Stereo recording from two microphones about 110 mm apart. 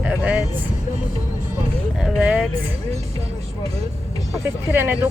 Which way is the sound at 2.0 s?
10° right (ahead or behind).